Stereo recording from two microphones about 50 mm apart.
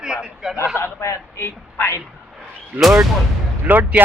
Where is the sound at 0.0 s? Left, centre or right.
Centre.